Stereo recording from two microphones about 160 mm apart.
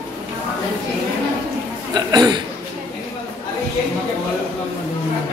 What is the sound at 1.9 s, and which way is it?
Speech, 25° right (ahead or behind).